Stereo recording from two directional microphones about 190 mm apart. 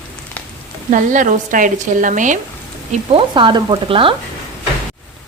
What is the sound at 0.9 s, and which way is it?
Speech, 40° right (ahead or behind).